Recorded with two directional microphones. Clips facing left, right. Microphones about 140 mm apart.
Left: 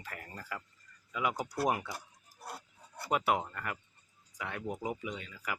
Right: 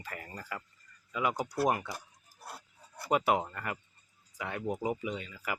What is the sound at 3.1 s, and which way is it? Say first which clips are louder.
Speech: right 3 dB; centre (ahead or behind).